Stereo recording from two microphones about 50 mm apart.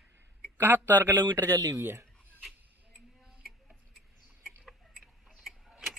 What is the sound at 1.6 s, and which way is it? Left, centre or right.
Speech, right.